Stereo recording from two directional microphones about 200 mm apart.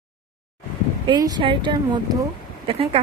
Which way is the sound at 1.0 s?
20° right (ahead or behind).